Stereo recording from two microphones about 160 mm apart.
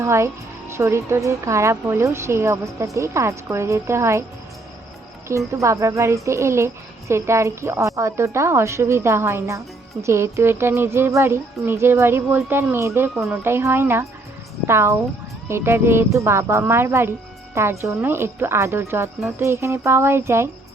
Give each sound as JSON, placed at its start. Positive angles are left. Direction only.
{"t": 0.0, "sound": "speech", "side_deg": -15}
{"t": 5.5, "sound": "speech", "side_deg": -20}